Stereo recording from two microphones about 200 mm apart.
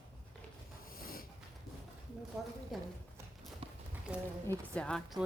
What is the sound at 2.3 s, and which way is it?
Speech, centre (ahead or behind).